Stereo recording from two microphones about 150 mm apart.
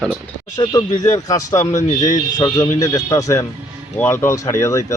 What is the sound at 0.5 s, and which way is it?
Speech, 25° left (ahead or behind).